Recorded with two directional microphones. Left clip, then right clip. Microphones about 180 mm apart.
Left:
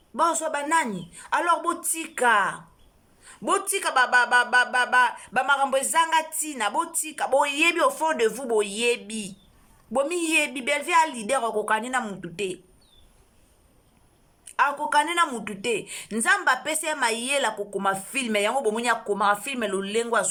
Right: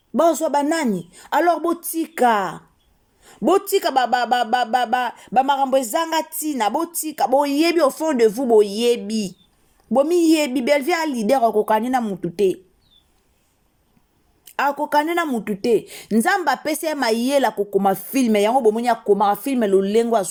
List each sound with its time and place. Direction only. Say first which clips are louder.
0.1 s speech: right 7 dB; 40° right (ahead or behind)
14.4 s speech: right 2 dB; 45° right (ahead or behind)